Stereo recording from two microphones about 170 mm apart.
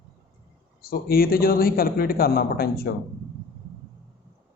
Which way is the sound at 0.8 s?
60° left (ahead or behind).